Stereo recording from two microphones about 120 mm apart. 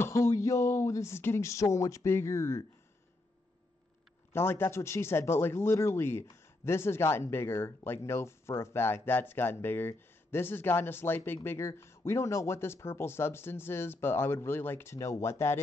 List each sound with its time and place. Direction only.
0.0 s speech: 25° left (ahead or behind)
4.3 s speech: 20° left (ahead or behind)